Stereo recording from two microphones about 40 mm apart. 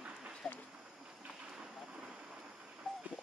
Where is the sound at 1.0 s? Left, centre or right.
Centre.